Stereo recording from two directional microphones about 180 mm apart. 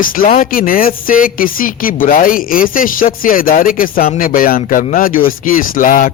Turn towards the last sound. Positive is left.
turn(degrees=50)  # may be behind; listen again after turning